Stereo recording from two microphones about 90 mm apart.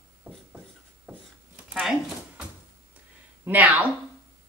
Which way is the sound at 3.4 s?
20° right (ahead or behind).